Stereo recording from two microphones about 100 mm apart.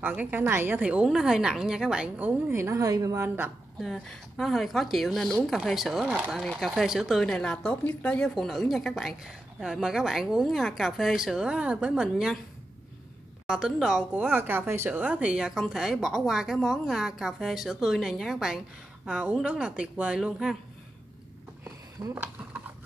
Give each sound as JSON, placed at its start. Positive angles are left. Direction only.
{"t": 0.0, "sound": "a woman's voice", "side_deg": -20}
{"t": 2.6, "sound": "a woman's voice", "side_deg": -35}
{"t": 3.8, "sound": "a woman's voice", "side_deg": 5}
{"t": 13.5, "sound": "a woman's voice", "side_deg": -5}
{"t": 14.1, "sound": "a woman's voice", "side_deg": -20}
{"t": 22.1, "sound": "speech", "side_deg": -15}